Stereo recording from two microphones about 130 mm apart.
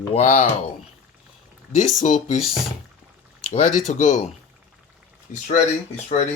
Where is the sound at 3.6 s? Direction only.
70° left (ahead or behind).